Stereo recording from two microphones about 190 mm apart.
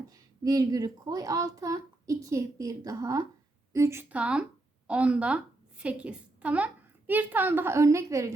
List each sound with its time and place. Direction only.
0.1 s a child's voice: 20° right (ahead or behind)